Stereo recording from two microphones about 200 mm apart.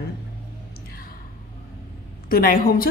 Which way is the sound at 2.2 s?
45° left (ahead or behind).